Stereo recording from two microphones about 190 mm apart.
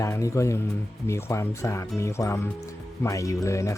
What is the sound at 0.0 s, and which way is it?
Speech, 15° left (ahead or behind).